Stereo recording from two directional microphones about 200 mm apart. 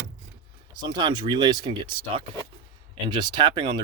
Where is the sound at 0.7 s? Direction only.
20° right (ahead or behind).